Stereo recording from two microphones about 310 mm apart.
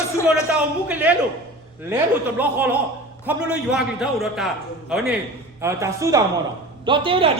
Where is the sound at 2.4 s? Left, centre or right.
Centre.